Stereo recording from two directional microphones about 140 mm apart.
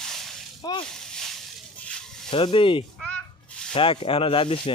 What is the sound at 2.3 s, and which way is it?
Speech, 35° left (ahead or behind).